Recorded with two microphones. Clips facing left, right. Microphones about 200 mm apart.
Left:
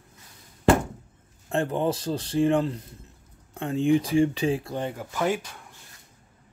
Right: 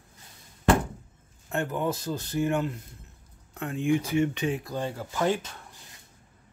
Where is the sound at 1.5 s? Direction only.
30° left (ahead or behind); by 5.4 s 10° left (ahead or behind).